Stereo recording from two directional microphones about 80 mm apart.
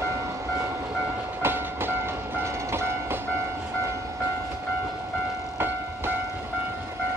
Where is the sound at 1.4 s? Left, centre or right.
Right.